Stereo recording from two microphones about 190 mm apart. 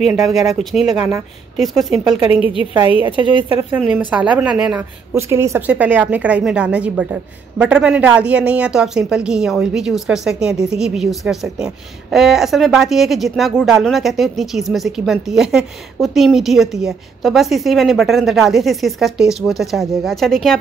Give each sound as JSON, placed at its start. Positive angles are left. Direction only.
{"t": 0.1, "sound": "a woman's voice", "side_deg": 0}
{"t": 2.2, "sound": "a woman's voice", "side_deg": 30}
{"t": 3.7, "sound": "a woman's voice", "side_deg": -5}